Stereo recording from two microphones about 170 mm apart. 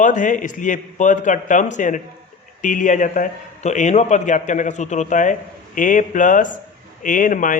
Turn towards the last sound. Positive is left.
turn(degrees=50)  # may be behind; listen again after turning